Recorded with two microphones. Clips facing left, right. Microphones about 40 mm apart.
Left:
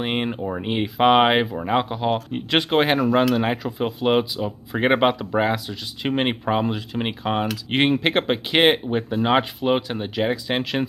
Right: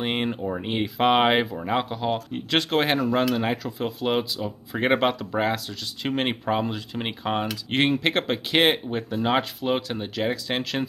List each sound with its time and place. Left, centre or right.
0.0 s speech: centre
0.3 s speech: centre